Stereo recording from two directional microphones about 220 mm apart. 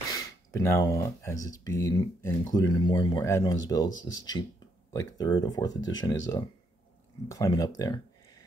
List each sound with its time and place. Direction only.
0.1 s speech: 15° left (ahead or behind)